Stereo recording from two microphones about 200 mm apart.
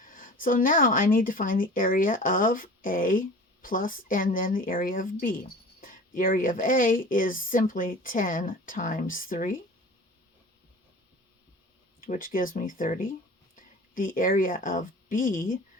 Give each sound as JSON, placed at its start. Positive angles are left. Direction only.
{"t": 0.0, "sound": "speech", "side_deg": 45}
{"t": 11.9, "sound": "speech", "side_deg": 45}